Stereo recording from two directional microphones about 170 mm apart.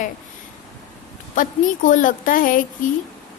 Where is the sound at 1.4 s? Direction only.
50° left (ahead or behind).